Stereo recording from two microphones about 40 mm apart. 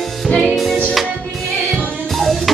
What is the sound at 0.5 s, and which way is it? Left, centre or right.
Music, centre.